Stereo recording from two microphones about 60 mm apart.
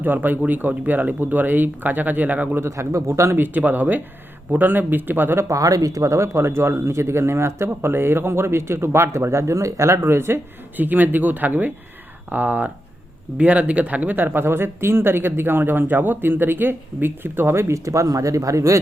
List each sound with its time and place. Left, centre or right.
0.0 s speech: right
2.6 s speech: right
3.4 s speech: right
5.5 s speech: right
10.8 s speech: right
17.7 s speech: right